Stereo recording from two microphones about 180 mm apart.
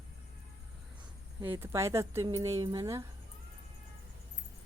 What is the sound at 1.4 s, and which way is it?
Speech, 15° right (ahead or behind).